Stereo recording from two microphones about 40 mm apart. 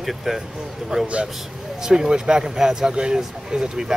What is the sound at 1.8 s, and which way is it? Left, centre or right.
Speech, centre.